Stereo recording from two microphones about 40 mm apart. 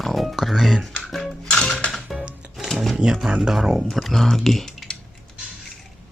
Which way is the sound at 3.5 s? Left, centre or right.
Centre.